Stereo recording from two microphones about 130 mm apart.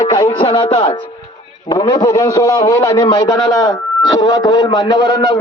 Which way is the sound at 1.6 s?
30° left (ahead or behind).